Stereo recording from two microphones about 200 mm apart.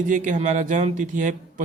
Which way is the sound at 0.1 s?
40° right (ahead or behind).